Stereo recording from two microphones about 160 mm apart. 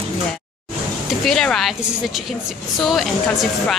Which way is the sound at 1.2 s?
5° left (ahead or behind).